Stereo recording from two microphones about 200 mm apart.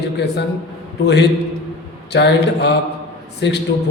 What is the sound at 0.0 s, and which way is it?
A man's voice, 55° left (ahead or behind).